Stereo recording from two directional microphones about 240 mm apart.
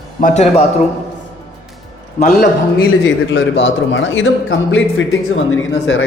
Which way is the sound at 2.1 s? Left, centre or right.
Left.